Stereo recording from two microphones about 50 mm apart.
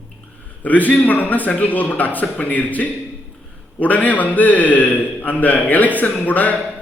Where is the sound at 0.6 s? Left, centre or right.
Left.